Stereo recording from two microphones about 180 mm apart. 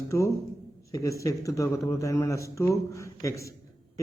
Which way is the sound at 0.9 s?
20° left (ahead or behind).